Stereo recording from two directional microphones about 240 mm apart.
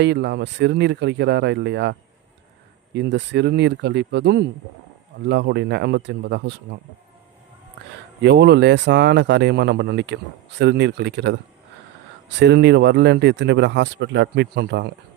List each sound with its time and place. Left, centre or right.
0.0 s speech: right
8.2 s speech: right
12.4 s speech: right